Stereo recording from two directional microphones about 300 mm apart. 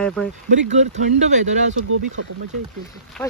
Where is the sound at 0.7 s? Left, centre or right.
Right.